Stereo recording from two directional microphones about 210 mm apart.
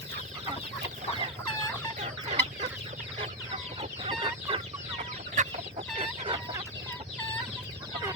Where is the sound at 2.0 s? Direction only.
35° right (ahead or behind).